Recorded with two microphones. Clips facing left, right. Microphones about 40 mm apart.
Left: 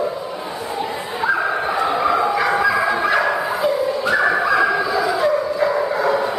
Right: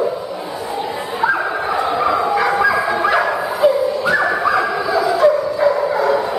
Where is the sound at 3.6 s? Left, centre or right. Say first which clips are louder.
Right 4 dB; centre.